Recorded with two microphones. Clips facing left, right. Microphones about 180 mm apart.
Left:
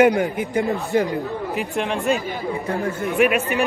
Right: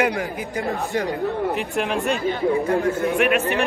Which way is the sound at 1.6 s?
Centre (ahead or behind).